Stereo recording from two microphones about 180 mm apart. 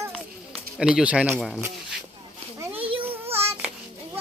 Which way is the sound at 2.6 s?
10° right (ahead or behind).